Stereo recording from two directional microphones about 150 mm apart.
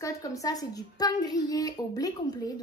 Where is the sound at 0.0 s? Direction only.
20° left (ahead or behind).